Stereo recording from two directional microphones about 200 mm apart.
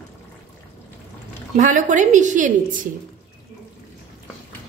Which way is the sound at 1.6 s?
40° right (ahead or behind).